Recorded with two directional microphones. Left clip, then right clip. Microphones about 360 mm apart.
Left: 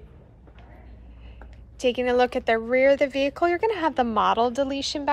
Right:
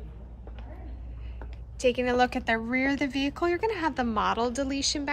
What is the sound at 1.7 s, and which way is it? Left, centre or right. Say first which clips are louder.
Speech: left 3 dB; centre.